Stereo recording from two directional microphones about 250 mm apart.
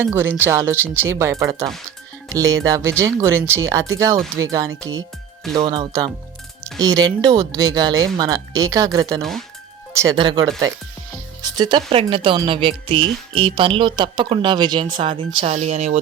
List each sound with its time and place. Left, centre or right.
0.0 s speech: centre
11.5 s speech: centre